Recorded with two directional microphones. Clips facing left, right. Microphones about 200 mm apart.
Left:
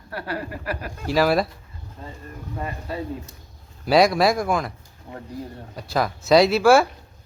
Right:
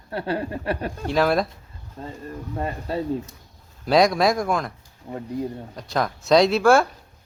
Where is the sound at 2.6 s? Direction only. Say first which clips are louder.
Right 3 dB; 30° right (ahead or behind).